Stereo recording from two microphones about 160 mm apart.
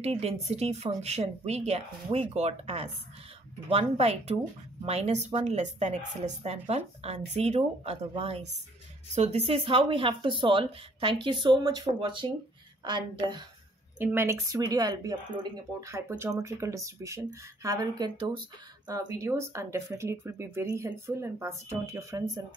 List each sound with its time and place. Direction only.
0.0 s speech: 40° right (ahead or behind)
13.9 s speech: 15° right (ahead or behind)